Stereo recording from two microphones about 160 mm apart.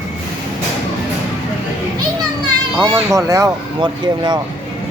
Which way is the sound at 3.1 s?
20° right (ahead or behind).